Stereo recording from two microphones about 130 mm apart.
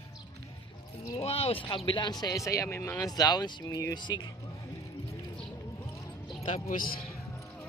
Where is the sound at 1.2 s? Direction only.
50° left (ahead or behind).